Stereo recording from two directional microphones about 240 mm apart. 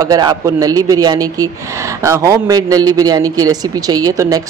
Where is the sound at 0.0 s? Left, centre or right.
Centre.